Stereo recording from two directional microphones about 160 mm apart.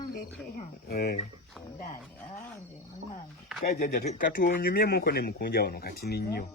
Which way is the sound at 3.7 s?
70° left (ahead or behind).